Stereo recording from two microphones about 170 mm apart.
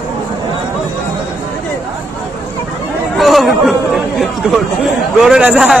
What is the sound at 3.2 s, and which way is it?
Chatter, centre (ahead or behind).